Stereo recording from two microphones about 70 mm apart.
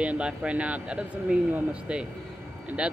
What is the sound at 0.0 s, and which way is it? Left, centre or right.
Speech, centre.